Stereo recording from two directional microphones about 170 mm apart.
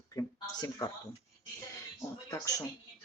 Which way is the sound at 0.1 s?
20° left (ahead or behind).